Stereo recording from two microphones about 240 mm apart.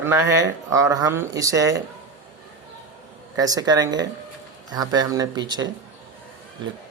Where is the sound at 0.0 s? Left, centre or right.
Centre.